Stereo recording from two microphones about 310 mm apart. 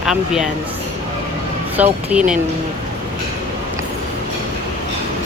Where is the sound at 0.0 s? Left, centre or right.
Centre.